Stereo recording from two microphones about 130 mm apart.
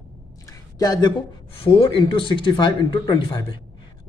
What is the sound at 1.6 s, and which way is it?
Speech, 45° left (ahead or behind).